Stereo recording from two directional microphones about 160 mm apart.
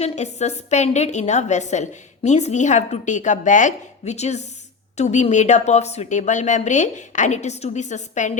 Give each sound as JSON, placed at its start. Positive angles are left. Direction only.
{"t": 0.0, "sound": "a woman's voice", "side_deg": 45}